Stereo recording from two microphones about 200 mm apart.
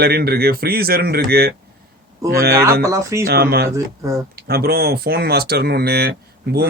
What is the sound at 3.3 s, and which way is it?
Speech, 50° right (ahead or behind).